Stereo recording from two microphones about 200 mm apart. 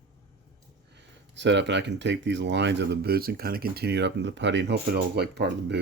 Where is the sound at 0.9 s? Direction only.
60° right (ahead or behind).